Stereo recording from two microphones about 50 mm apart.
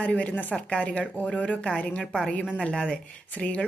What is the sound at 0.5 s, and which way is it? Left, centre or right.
A woman's voice, left.